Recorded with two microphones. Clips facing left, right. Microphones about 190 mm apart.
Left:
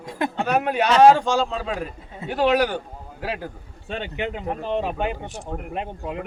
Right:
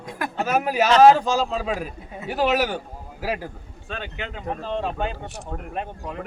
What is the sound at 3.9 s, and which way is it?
Speech, 20° left (ahead or behind).